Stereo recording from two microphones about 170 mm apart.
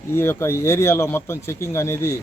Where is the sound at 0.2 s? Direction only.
15° left (ahead or behind).